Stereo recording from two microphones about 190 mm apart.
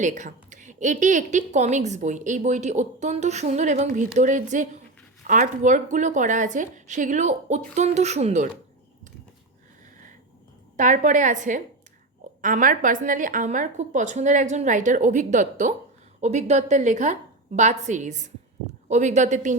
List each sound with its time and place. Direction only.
0.0 s a woman's voice: 40° right (ahead or behind)
10.8 s a woman's voice: 40° right (ahead or behind)